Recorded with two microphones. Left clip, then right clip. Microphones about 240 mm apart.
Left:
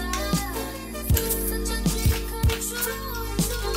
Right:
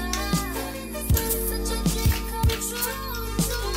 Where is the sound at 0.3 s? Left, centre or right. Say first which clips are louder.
Even; centre.